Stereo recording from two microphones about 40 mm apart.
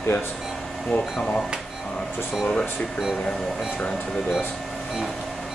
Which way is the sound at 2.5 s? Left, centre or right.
Centre.